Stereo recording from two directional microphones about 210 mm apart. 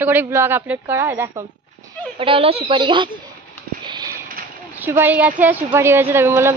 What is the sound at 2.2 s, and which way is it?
Speech, 25° right (ahead or behind).